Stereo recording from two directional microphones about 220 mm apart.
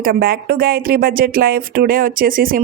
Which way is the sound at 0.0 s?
45° right (ahead or behind).